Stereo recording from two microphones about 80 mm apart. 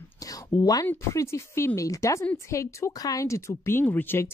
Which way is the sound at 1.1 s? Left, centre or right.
Left.